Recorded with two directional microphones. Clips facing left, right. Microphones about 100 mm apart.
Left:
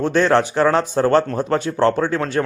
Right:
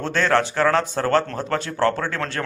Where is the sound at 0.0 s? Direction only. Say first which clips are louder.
Left 4 dB; 20° left (ahead or behind).